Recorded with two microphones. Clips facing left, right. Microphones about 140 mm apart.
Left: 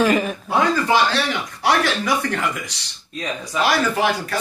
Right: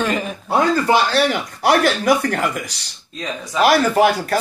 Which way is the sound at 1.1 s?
50° right (ahead or behind).